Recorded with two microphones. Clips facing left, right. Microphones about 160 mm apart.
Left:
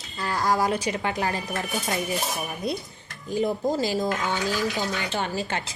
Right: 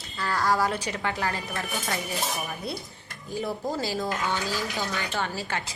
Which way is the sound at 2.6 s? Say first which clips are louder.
Left 5 dB; 15° left (ahead or behind).